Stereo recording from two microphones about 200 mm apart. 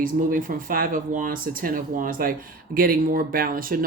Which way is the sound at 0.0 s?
45° right (ahead or behind).